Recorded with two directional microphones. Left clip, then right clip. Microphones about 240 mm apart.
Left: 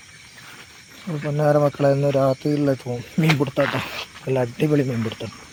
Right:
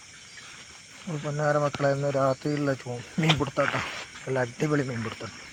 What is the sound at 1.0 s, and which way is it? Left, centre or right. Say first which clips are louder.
Speech: left 5 dB; centre.